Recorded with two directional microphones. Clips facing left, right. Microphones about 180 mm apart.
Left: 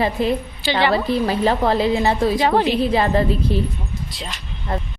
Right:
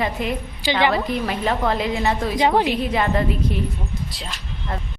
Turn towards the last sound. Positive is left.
turn(degrees=30)  # may be behind; listen again after turning